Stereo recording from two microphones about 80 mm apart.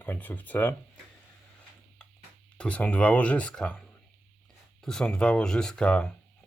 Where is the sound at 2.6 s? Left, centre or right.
Centre.